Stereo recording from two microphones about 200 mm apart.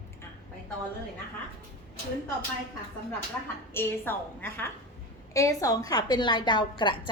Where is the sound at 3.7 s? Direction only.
10° left (ahead or behind).